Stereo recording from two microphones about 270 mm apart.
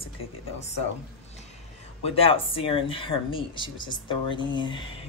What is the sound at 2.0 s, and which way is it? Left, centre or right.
Speech, left.